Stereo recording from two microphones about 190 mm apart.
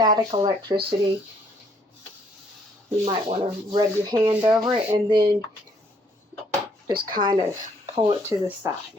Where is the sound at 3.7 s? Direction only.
25° right (ahead or behind).